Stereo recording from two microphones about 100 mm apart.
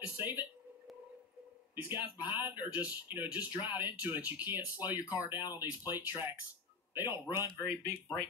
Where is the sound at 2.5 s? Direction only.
15° right (ahead or behind).